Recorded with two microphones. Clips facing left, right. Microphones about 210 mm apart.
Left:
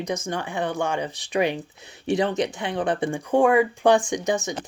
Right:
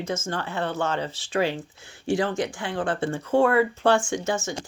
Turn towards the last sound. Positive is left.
turn(degrees=15)  # may be behind; listen again after turning